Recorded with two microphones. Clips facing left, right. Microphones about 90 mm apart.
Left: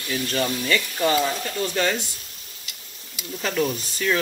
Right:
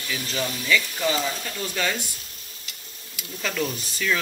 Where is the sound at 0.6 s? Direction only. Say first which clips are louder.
Left 1 dB; 45° left (ahead or behind).